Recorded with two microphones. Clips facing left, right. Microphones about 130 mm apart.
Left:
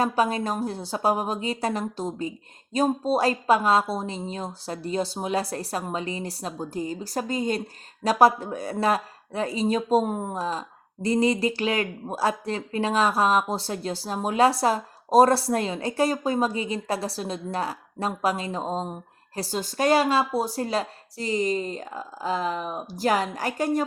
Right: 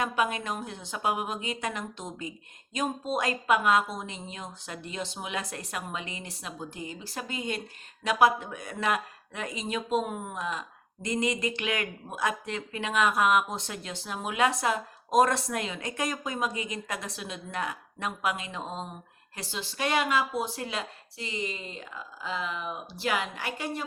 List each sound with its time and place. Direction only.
0.0 s a woman's voice: 35° left (ahead or behind)